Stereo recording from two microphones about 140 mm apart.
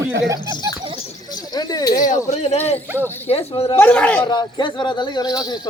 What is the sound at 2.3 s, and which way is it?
Speech, 55° left (ahead or behind).